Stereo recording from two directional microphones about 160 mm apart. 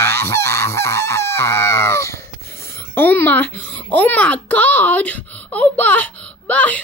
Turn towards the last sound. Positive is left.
turn(degrees=10)  # may be behind; listen again after turning